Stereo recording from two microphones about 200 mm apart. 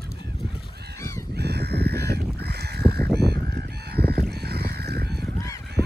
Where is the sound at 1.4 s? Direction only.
55° right (ahead or behind).